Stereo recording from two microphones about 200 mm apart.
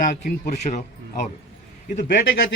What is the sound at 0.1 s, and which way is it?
A man's voice, 45° left (ahead or behind).